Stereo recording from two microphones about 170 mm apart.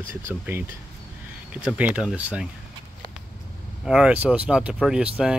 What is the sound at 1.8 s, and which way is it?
Speech, 5° right (ahead or behind).